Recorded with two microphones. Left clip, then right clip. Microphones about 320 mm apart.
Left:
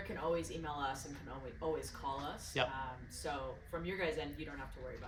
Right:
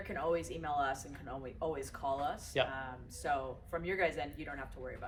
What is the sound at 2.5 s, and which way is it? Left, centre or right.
Speech, centre.